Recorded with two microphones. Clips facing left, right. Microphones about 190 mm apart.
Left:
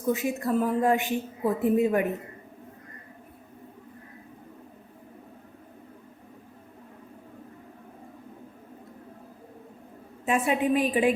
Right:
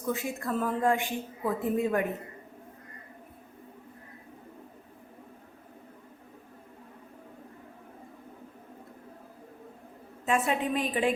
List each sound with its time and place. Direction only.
0.1 s a woman's voice: 20° left (ahead or behind)
10.2 s a woman's voice: 15° left (ahead or behind)